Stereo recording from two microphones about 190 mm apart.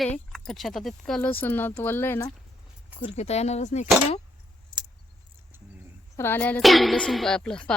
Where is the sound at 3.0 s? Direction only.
35° left (ahead or behind).